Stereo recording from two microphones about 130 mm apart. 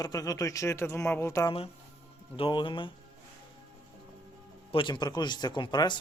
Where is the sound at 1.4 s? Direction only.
45° left (ahead or behind).